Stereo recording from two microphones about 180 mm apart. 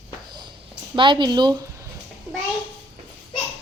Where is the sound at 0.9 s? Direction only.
25° right (ahead or behind).